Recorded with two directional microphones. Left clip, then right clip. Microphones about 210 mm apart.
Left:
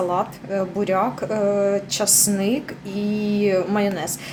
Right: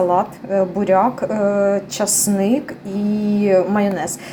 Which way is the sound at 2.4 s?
5° left (ahead or behind).